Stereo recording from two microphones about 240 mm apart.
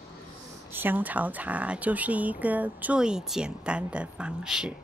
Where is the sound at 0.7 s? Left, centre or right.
Centre.